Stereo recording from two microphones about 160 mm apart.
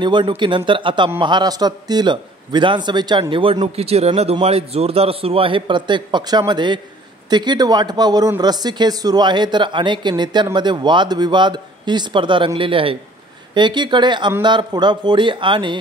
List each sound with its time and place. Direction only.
0.0 s a man's voice: 30° right (ahead or behind)